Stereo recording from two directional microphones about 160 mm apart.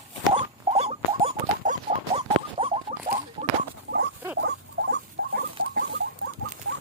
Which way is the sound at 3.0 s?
55° right (ahead or behind).